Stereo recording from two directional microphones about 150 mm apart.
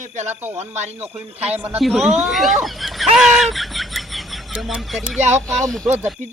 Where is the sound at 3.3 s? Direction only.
Centre (ahead or behind).